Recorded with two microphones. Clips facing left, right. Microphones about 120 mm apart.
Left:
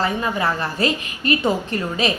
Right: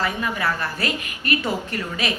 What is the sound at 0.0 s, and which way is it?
A woman's voice, 25° left (ahead or behind).